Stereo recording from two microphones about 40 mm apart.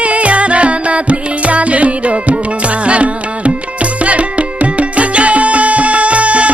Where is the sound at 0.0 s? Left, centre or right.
Right.